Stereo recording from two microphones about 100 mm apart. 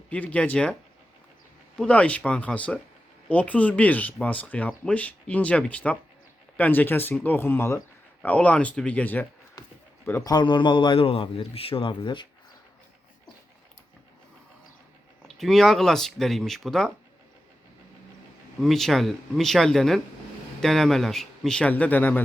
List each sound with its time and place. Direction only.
0.1 s speech: 15° left (ahead or behind)
8.2 s speech: 15° left (ahead or behind)
10.2 s a man's voice: 50° left (ahead or behind)
15.4 s a man's voice: 5° left (ahead or behind)
18.6 s a man's voice: centre (ahead or behind); by 22.2 s 15° left (ahead or behind)